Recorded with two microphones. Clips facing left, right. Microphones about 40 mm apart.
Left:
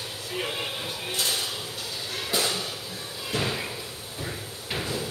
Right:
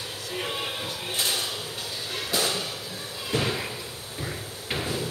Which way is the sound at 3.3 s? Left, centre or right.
Centre.